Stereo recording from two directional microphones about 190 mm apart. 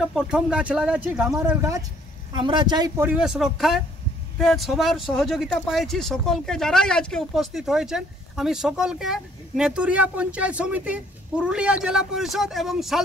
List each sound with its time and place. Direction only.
0.0 s speech: 5° right (ahead or behind)
1.6 s a man's voice: 20° right (ahead or behind)
3.1 s speech: 5° right (ahead or behind)